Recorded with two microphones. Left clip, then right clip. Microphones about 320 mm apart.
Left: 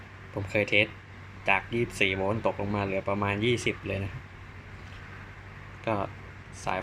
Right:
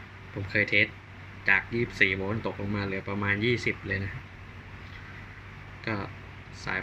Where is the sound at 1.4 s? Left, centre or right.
Left.